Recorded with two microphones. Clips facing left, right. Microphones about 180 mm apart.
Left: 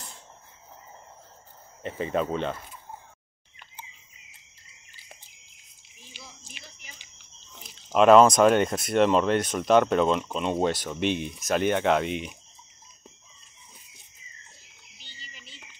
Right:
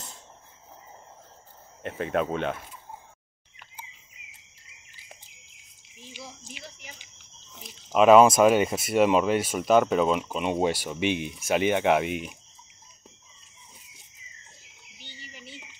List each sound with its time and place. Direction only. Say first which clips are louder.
1.8 s speech: even; 5° right (ahead or behind)
6.1 s whispering: right 6 dB; 15° right (ahead or behind)
7.5 s speech: even; 5° right (ahead or behind)
15.0 s a sound: right 5 dB; 65° right (ahead or behind)